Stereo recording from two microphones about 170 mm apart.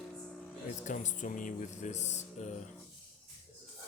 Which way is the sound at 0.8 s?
45° left (ahead or behind).